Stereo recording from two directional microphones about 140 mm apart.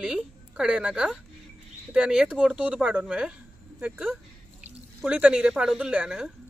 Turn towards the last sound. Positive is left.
turn(degrees=-5)  # may be behind; listen again after turning